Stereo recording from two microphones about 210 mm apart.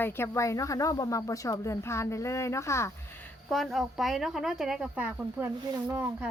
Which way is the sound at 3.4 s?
Centre (ahead or behind).